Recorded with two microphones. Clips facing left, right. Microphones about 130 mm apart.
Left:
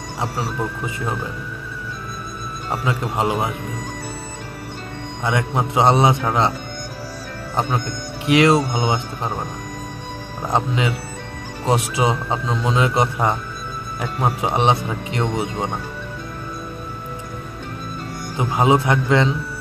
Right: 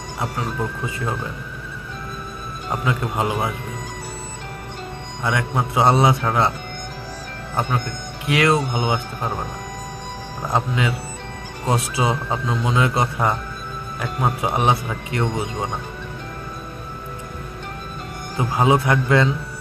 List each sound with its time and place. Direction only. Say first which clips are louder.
2.8 s a man's voice: left 1 dB; 25° left (ahead or behind)
5.2 s a man's voice: left 1 dB; 25° left (ahead or behind)
8.3 s a man's voice: left 4 dB; 20° left (ahead or behind)
10.5 s a man's voice: left 1 dB; 25° left (ahead or behind)
18.4 s a man's voice: left 1 dB; 20° left (ahead or behind)